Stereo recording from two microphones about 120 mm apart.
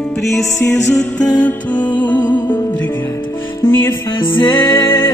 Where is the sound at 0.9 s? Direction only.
10° left (ahead or behind).